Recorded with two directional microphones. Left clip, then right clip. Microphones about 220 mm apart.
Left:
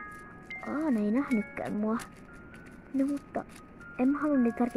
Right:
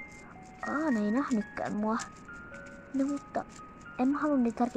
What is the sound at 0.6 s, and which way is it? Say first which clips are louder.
Speech: right 1 dB; centre (ahead or behind).